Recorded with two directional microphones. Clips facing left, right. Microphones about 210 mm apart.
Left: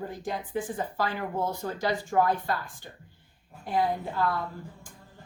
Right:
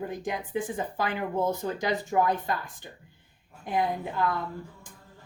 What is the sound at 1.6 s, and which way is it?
Speech, 20° right (ahead or behind).